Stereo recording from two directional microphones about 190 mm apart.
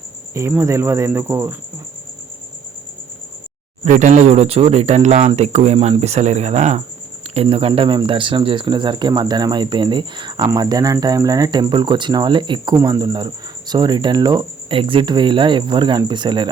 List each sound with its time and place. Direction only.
0.3 s speech: 15° right (ahead or behind)
3.8 s speech: 40° right (ahead or behind); by 16.5 s 25° right (ahead or behind)